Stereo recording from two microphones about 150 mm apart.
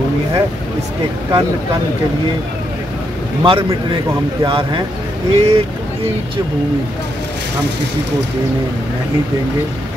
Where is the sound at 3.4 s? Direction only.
35° right (ahead or behind).